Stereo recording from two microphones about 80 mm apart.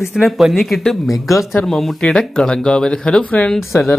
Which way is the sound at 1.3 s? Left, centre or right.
Left.